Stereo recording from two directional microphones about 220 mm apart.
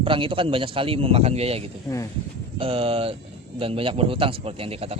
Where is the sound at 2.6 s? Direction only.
25° right (ahead or behind).